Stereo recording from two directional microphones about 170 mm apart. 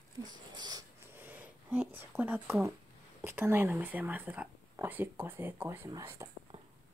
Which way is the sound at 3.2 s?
15° right (ahead or behind).